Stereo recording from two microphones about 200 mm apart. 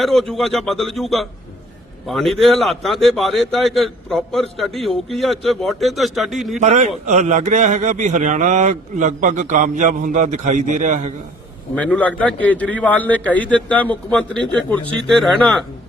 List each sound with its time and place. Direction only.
0.0 s a man's voice: centre (ahead or behind)
6.6 s a man's voice: 35° right (ahead or behind)
11.7 s a man's voice: 5° left (ahead or behind)